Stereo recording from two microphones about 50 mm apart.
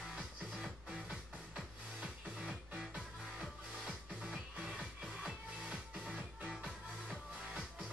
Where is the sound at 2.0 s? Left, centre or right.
Centre.